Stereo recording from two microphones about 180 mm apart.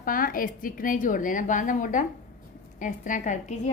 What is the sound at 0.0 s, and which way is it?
A woman's voice, 50° left (ahead or behind).